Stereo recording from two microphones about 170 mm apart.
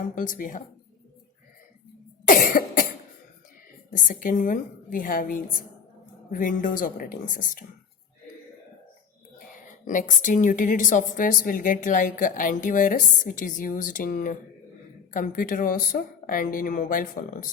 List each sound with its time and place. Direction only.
0.1 s a woman's voice: 55° left (ahead or behind)
2.2 s cough: 55° left (ahead or behind)
3.9 s a woman's voice: 55° left (ahead or behind)
9.8 s a woman's voice: 50° left (ahead or behind)